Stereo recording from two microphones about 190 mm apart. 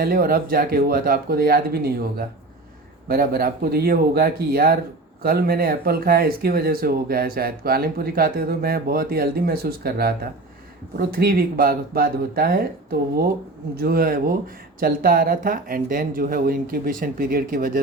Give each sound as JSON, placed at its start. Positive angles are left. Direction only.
{"t": 0.0, "sound": "speech", "side_deg": -50}